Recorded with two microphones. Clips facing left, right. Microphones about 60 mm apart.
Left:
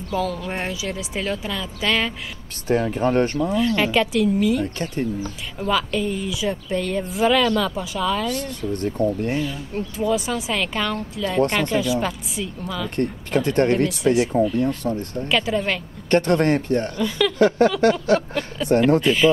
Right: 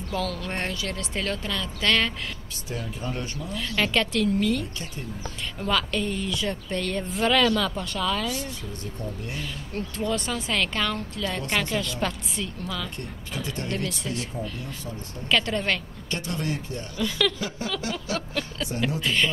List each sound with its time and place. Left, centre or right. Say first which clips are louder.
0.1 s a woman's voice: left 5 dB; centre
2.7 s speech: left 13 dB; left
3.5 s a woman's voice: left 4 dB; centre
8.4 s speech: left 9 dB; left
9.8 s a woman's voice: left 5 dB; centre
12.9 s speech: left 13 dB; left
14.0 s speech: left 14 dB; left
14.6 s speech: left 14 dB; left
15.2 s a woman's voice: left 2 dB; centre
16.1 s speech: left 13 dB; left
18.1 s a woman's voice: left 9 dB; centre